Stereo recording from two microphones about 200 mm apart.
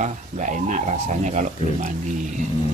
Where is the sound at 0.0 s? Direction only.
40° right (ahead or behind).